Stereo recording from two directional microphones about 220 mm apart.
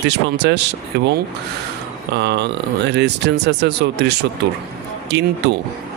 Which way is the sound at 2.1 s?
50° right (ahead or behind).